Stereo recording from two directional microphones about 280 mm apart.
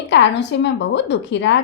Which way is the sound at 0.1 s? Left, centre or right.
Left.